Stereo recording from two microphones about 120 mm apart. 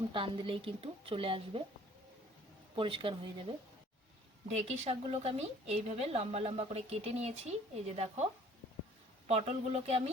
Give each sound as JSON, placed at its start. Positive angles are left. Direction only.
{"t": 0.1, "sound": "a woman's voice", "side_deg": -45}
{"t": 2.7, "sound": "a woman's voice", "side_deg": -45}
{"t": 4.8, "sound": "a woman's voice", "side_deg": -60}